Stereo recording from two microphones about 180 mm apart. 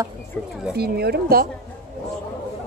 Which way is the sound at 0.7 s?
60° right (ahead or behind).